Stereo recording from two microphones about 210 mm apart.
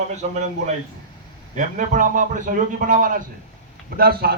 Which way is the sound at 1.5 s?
35° right (ahead or behind).